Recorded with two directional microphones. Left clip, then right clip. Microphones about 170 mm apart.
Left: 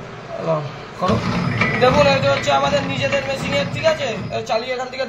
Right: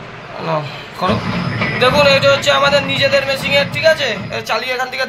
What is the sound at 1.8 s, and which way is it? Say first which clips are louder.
Speech: right 4 dB; 10° right (ahead or behind).